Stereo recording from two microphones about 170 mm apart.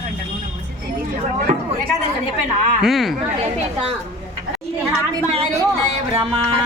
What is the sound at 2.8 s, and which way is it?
Speech, centre (ahead or behind).